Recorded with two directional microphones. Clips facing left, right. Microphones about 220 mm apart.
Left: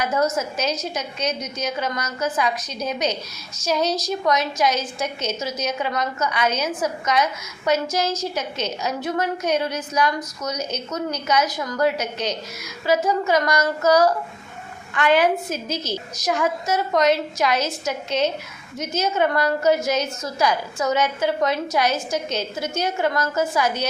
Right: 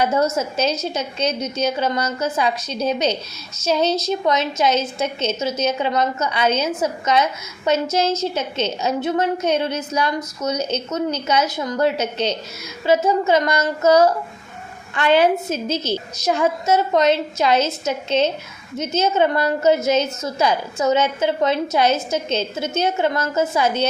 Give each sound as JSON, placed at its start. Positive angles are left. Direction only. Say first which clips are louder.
{"t": 0.0, "sound": "a woman's voice", "louder": "right 3 dB", "side_deg": -25}